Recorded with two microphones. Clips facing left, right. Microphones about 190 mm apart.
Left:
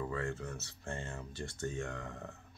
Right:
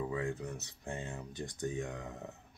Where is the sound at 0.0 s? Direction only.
15° right (ahead or behind).